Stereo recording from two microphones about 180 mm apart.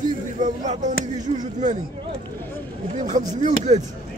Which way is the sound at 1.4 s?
40° right (ahead or behind).